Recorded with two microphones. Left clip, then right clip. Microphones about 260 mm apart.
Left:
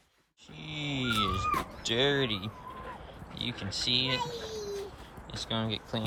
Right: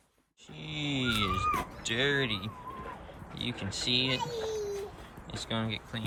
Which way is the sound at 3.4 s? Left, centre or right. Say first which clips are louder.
Left 1 dB; centre.